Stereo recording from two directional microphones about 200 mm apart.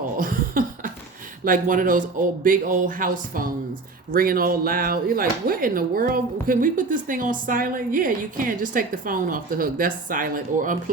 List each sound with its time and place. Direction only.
0.2 s cough: 45° right (ahead or behind)
1.5 s speech: 40° right (ahead or behind)